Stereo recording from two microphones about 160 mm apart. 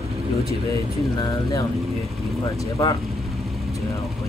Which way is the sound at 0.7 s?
20° left (ahead or behind).